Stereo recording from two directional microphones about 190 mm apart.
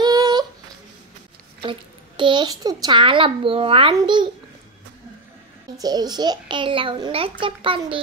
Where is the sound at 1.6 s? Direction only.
25° right (ahead or behind).